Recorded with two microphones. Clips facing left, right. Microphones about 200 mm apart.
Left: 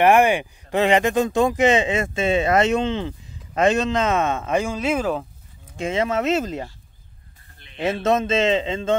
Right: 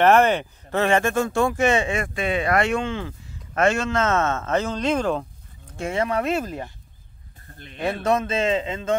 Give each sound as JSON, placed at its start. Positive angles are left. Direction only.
{"t": 0.0, "sound": "speech", "side_deg": 10}
{"t": 5.8, "sound": "a man's voice", "side_deg": 20}
{"t": 7.7, "sound": "a man's voice", "side_deg": 20}